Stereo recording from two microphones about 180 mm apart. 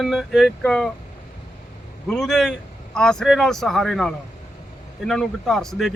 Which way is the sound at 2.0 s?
Centre (ahead or behind).